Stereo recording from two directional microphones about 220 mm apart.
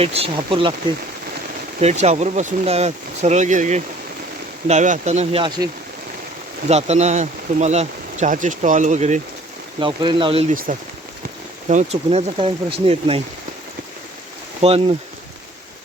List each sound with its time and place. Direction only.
0.0 s speech: 25° right (ahead or behind)
1.8 s speech: 30° right (ahead or behind)
6.7 s speech: 30° right (ahead or behind)
9.8 s speech: 20° right (ahead or behind)
10.5 s speech: 40° right (ahead or behind)
14.6 s speech: 25° right (ahead or behind)